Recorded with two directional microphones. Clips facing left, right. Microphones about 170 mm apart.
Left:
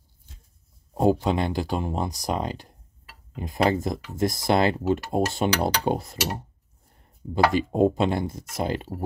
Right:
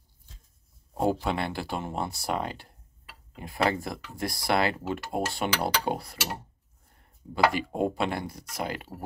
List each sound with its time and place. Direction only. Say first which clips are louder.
0.9 s speech: left 5 dB; 20° left (ahead or behind)
7.5 s speech: left 7 dB; 20° left (ahead or behind)